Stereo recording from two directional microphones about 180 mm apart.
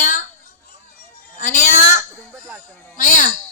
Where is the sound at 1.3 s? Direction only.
45° left (ahead or behind).